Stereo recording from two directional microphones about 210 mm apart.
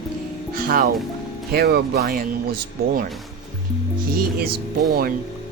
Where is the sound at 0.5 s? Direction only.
40° right (ahead or behind).